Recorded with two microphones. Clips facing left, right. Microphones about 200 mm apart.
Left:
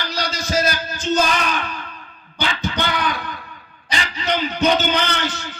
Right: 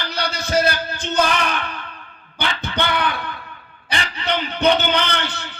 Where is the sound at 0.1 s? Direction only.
60° right (ahead or behind).